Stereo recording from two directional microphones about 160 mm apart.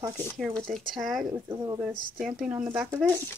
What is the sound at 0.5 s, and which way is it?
Speech, centre (ahead or behind).